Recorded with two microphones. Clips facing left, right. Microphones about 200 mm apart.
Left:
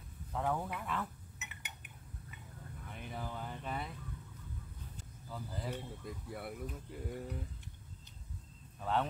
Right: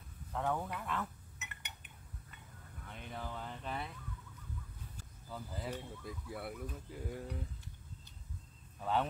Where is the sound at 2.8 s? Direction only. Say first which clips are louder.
Left 1 dB; 5° left (ahead or behind).